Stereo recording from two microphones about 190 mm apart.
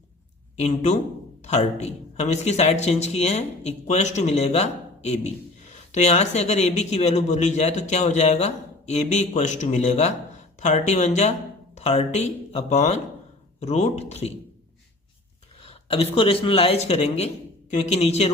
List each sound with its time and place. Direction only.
0.5 s speech: 35° left (ahead or behind)
15.6 s speech: 30° left (ahead or behind)